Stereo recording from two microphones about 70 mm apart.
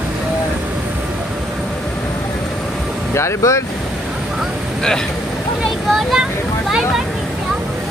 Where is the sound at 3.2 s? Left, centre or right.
Left.